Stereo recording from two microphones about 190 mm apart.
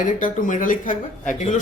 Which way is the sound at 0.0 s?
45° left (ahead or behind).